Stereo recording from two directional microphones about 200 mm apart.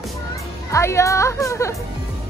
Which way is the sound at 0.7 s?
15° left (ahead or behind).